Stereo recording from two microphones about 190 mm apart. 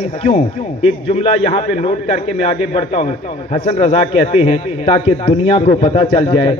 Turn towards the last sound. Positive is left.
turn(degrees=30)  # may be behind; listen again after turning